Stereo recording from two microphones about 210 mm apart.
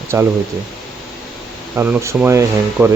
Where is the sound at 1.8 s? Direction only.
10° right (ahead or behind).